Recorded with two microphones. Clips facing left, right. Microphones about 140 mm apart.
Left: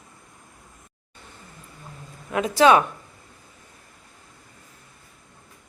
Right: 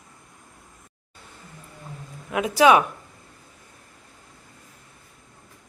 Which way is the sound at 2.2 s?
10° right (ahead or behind).